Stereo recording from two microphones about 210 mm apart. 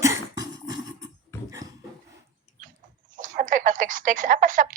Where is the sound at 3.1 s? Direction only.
40° right (ahead or behind).